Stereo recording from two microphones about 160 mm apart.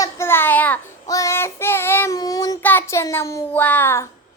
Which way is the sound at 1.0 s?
20° left (ahead or behind).